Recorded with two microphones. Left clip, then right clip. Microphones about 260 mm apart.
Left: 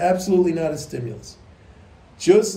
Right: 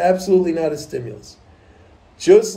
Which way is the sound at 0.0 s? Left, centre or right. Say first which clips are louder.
Right 3 dB; centre.